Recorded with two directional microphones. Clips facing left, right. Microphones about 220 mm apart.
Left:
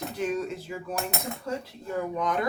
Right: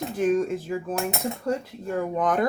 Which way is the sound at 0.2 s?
50° right (ahead or behind).